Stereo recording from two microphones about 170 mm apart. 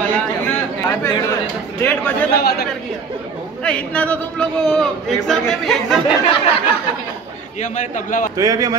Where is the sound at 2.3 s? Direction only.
70° left (ahead or behind).